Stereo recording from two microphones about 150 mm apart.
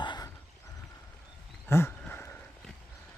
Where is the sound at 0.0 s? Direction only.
30° left (ahead or behind).